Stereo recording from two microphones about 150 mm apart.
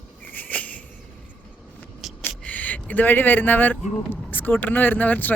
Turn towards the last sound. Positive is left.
turn(degrees=10)  # may be behind; listen again after turning